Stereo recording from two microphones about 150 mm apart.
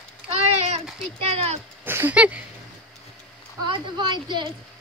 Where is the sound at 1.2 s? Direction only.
40° right (ahead or behind).